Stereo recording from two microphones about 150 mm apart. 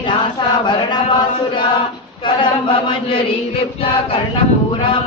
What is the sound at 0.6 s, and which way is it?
Speech, 30° left (ahead or behind).